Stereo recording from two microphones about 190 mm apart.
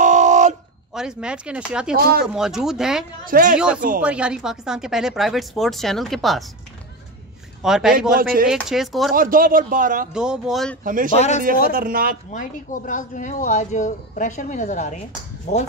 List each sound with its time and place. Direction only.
0.0 s a sound: 40° right (ahead or behind)
0.9 s speech: 5° right (ahead or behind)
3.3 s a man's voice: 50° right (ahead or behind)
3.5 s speech: 5° right (ahead or behind)
7.6 s speech: 5° right (ahead or behind)
8.2 s a man's voice: 50° right (ahead or behind)
8.5 s speech: centre (ahead or behind)
9.1 s a man's voice: 50° right (ahead or behind)
10.1 s speech: 5° right (ahead or behind)
10.8 s a man's voice: 45° right (ahead or behind)
11.1 s speech: 35° left (ahead or behind)
11.7 s a man's voice: 50° right (ahead or behind)
12.3 s speech: 45° left (ahead or behind)